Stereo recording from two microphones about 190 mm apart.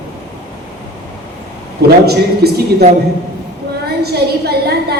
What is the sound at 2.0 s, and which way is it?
Speech, 55° right (ahead or behind).